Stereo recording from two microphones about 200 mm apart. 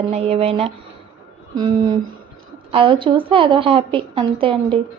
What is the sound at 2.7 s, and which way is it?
Speech, 25° right (ahead or behind).